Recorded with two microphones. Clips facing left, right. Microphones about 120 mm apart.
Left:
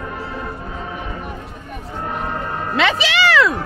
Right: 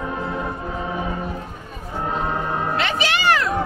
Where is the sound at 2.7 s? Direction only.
90° left.